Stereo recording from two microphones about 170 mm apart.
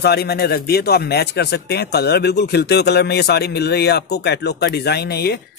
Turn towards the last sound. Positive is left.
turn(degrees=70)  # may be behind; listen again after turning